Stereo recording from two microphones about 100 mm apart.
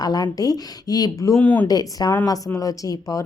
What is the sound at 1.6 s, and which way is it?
A woman's voice, 40° left (ahead or behind).